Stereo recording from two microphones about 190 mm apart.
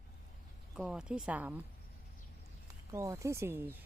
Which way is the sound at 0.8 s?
5° right (ahead or behind).